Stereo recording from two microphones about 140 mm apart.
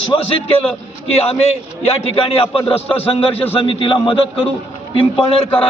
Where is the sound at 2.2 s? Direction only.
40° left (ahead or behind).